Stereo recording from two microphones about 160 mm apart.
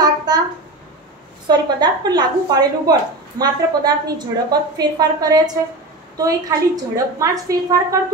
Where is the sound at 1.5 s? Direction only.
25° right (ahead or behind).